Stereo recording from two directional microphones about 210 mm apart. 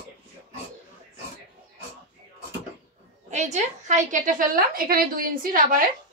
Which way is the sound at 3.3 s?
35° right (ahead or behind).